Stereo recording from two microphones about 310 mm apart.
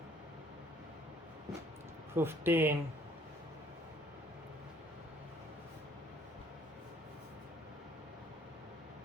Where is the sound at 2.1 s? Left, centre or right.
Centre.